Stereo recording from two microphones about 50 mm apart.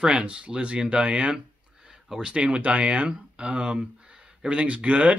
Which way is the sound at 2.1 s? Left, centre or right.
Centre.